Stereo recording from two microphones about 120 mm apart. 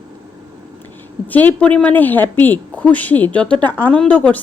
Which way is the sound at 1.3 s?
15° left (ahead or behind).